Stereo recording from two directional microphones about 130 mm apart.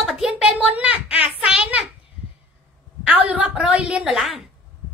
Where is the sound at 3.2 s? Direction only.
10° right (ahead or behind).